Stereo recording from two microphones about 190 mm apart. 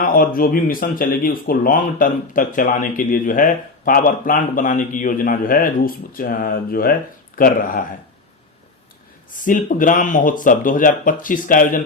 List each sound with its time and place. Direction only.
0.0 s speech: 50° left (ahead or behind)
9.4 s speech: 45° left (ahead or behind)